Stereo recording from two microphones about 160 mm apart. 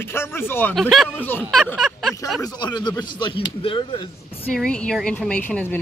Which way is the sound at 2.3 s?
25° left (ahead or behind).